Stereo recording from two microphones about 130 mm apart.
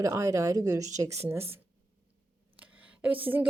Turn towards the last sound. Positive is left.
turn(degrees=-15)  # may be behind; listen again after turning